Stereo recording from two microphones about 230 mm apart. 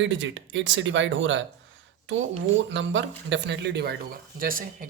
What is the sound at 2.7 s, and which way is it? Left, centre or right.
Speech, right.